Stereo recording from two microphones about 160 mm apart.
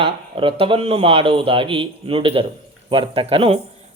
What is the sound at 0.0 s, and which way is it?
A man's voice, 35° right (ahead or behind).